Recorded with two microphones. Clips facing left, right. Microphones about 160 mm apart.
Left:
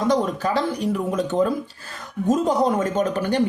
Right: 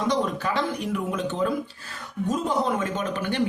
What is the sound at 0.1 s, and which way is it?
A man's voice, 40° left (ahead or behind).